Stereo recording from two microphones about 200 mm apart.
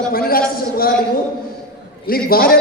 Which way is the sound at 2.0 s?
50° left (ahead or behind).